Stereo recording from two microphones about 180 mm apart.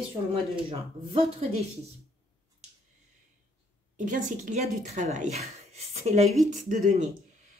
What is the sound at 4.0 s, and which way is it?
Speech, 45° right (ahead or behind).